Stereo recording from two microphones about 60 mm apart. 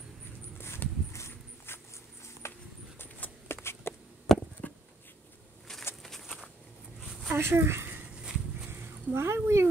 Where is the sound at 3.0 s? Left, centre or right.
Left.